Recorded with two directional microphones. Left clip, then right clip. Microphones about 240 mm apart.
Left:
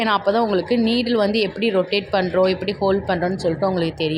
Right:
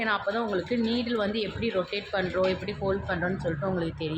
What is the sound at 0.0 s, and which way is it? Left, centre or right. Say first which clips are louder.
A woman's voice: left 9 dB; left.